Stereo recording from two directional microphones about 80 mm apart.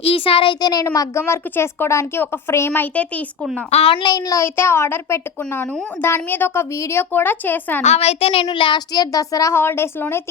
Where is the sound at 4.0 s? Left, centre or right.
Left.